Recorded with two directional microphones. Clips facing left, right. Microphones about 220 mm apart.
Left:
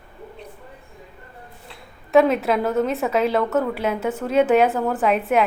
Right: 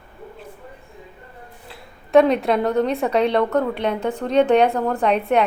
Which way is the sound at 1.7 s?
Centre (ahead or behind).